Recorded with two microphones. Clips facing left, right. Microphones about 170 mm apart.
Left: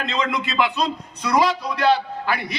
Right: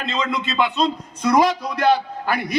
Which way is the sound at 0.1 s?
25° right (ahead or behind).